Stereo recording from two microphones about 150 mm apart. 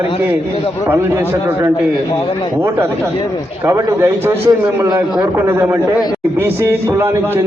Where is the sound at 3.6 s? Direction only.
20° right (ahead or behind).